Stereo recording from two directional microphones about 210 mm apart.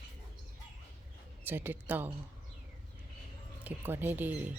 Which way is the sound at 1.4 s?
10° right (ahead or behind).